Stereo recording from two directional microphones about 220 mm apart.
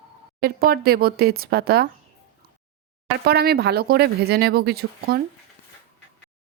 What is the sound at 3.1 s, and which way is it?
Speech, 45° right (ahead or behind).